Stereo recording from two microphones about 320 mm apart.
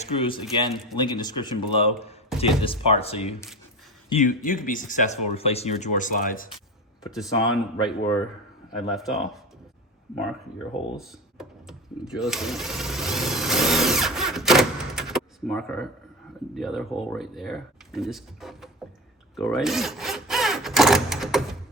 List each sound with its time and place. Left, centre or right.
0.0 s speech: centre
0.4 s speech: centre
0.9 s speech: centre
7.1 s speech: centre
10.9 s a sound: centre
16.6 s speech: centre
19.4 s a sound: centre